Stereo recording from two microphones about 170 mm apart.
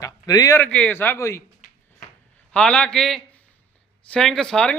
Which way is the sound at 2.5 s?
5° left (ahead or behind).